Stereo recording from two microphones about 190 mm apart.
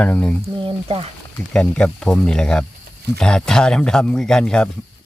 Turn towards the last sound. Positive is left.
turn(degrees=5)  # may be behind; listen again after turning